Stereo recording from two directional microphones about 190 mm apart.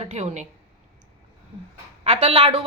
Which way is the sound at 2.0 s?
35° right (ahead or behind).